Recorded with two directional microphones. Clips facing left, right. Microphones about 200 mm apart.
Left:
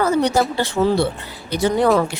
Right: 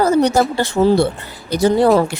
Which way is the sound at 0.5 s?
45° right (ahead or behind).